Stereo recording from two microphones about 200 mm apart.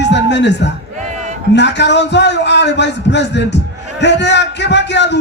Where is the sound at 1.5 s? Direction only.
60° left (ahead or behind).